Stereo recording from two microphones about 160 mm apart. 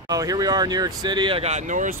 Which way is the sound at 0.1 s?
25° right (ahead or behind).